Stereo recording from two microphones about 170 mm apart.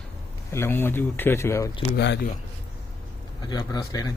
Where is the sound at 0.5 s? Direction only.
15° left (ahead or behind).